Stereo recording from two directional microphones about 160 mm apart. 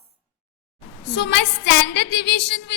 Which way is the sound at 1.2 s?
90° left.